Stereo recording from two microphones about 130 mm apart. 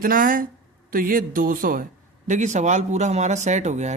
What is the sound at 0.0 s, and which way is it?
Speech, 90° right.